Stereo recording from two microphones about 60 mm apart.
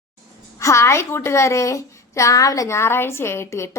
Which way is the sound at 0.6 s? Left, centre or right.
Left.